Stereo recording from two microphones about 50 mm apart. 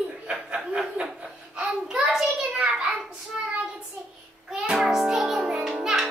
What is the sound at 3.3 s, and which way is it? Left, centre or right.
Child singing, centre.